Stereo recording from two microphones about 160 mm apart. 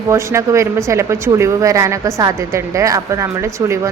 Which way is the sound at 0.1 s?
20° right (ahead or behind).